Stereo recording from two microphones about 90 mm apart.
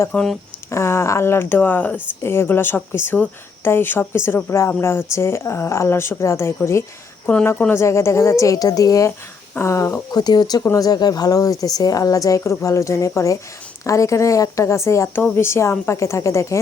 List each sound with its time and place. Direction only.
0.1 s speech: 10° left (ahead or behind)
0.7 s speech: 30° left (ahead or behind)
10.1 s speech: 50° left (ahead or behind)
10.6 s speech: 30° left (ahead or behind)
10.8 s speech: 45° left (ahead or behind)